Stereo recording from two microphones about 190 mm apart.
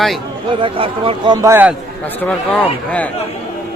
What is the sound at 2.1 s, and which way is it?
Speech, 10° left (ahead or behind).